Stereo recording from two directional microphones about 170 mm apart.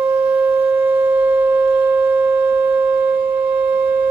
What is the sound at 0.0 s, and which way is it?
Shofar, 10° right (ahead or behind).